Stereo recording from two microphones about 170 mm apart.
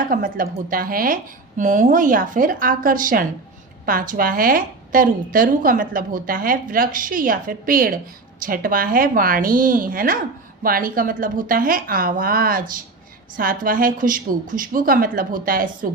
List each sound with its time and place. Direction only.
0.0 s a woman's voice: 55° right (ahead or behind)